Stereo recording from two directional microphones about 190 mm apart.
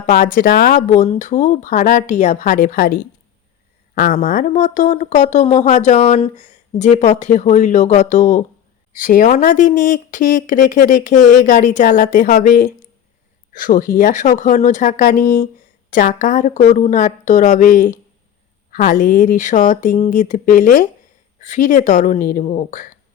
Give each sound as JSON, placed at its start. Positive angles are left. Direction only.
{"t": 0.1, "sound": "speech", "side_deg": 45}
{"t": 1.0, "sound": "speech", "side_deg": 40}
{"t": 4.3, "sound": "speech", "side_deg": 45}